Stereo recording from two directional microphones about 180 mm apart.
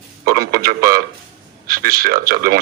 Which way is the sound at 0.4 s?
55° right (ahead or behind).